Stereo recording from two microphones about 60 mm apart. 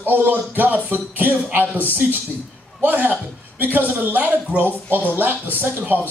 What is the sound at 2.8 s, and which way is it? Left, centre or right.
A man's voice, right.